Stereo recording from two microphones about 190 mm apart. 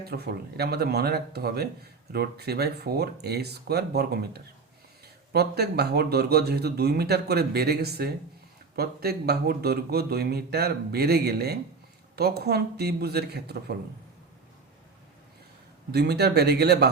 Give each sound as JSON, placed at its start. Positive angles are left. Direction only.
{"t": 0.0, "sound": "speech", "side_deg": -55}
{"t": 15.9, "sound": "speech", "side_deg": -60}